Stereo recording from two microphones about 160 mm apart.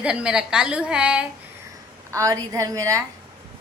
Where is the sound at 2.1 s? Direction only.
20° right (ahead or behind).